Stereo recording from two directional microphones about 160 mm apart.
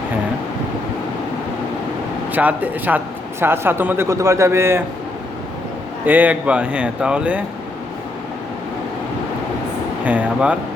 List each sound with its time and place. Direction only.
2.3 s a man's voice: 10° right (ahead or behind)
6.1 s a man's voice: 10° right (ahead or behind)
10.0 s a man's voice: 10° right (ahead or behind)